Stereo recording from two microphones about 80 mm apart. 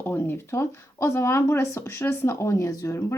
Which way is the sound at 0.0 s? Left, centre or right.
Left.